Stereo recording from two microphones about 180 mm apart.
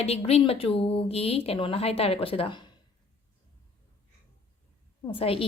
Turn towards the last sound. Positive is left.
turn(degrees=30)  # may be behind; listen again after turning